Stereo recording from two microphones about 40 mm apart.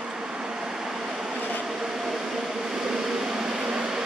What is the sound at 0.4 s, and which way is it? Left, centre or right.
Vehicle, centre.